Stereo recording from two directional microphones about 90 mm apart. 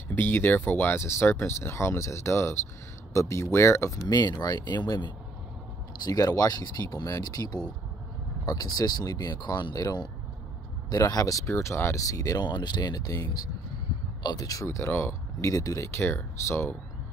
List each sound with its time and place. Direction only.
0.1 s speech: 25° left (ahead or behind); by 9.8 s 50° left (ahead or behind)
10.9 s speech: 45° left (ahead or behind)
12.4 s speech: 55° left (ahead or behind)
16.0 s speech: 30° left (ahead or behind)